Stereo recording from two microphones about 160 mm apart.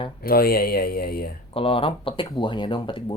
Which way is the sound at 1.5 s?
35° left (ahead or behind).